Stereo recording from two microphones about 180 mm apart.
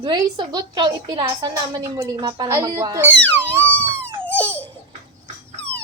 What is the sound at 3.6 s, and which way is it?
Crying, 10° left (ahead or behind).